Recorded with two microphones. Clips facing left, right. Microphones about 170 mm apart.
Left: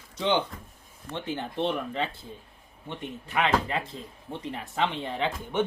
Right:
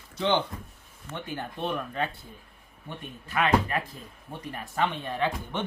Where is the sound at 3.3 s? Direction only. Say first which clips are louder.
Right 1 dB; 20° left (ahead or behind).